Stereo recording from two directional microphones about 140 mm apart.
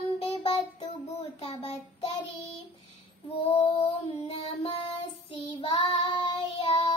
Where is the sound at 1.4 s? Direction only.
45° left (ahead or behind).